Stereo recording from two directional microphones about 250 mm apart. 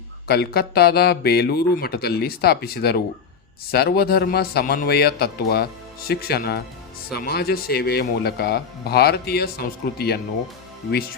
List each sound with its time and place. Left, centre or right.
0.3 s a man's voice: left